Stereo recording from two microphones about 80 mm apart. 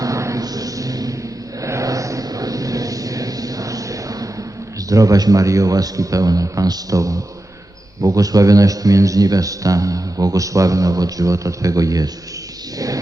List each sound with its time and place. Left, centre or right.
0.0 s a sound: right
1.6 s vehicle: right
4.9 s a man's voice: right